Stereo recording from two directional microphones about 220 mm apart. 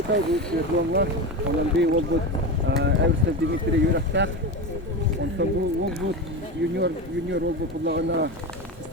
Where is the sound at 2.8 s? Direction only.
50° right (ahead or behind).